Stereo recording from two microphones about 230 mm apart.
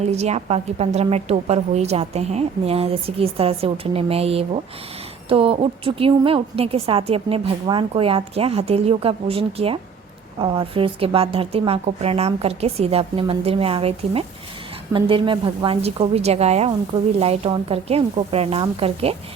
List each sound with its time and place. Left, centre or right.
0.0 s a woman's voice: right